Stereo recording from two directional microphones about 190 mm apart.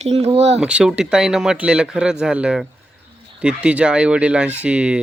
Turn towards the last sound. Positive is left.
turn(degrees=-5)  # may be behind; listen again after turning